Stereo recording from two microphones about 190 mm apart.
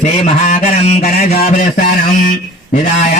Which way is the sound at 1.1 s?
50° left (ahead or behind).